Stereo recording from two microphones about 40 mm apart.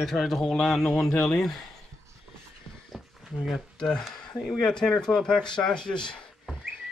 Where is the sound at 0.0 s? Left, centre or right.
Centre.